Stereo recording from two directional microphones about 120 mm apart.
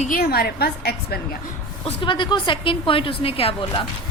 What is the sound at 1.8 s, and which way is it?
A woman's voice, 45° left (ahead or behind).